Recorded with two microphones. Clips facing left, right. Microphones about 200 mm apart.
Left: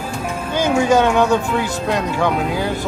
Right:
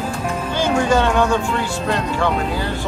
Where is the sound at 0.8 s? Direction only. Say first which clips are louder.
Left 3 dB; 10° left (ahead or behind).